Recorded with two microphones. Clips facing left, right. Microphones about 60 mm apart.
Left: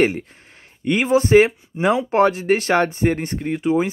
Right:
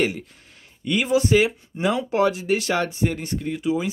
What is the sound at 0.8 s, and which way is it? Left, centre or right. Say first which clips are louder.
Speech: left 3 dB; left.